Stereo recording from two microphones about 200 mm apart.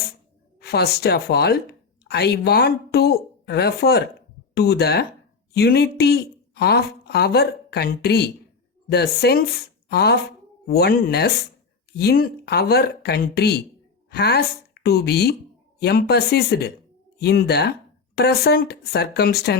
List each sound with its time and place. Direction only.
0.6 s speech: 55° left (ahead or behind)